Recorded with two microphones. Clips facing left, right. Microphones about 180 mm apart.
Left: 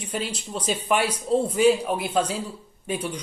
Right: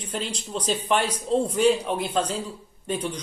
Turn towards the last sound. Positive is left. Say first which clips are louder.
# even
turn(degrees=10)  # may be behind; listen again after turning